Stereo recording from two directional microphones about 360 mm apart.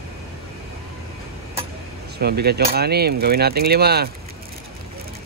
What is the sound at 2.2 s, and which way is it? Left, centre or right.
Speech, right.